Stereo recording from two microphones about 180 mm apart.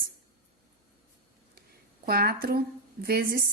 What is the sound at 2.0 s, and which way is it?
A woman's voice, 55° right (ahead or behind).